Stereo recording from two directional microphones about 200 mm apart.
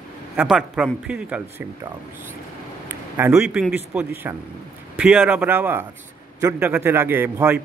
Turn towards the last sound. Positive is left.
turn(degrees=-10)  # may be behind; listen again after turning